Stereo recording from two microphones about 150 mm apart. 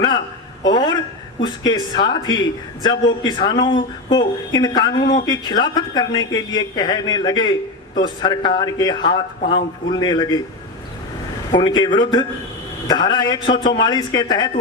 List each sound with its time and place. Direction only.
0.6 s a man's voice: 25° left (ahead or behind)
11.5 s a man's voice: 30° left (ahead or behind)